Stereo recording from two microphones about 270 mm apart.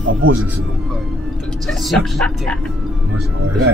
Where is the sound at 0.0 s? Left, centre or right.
Right.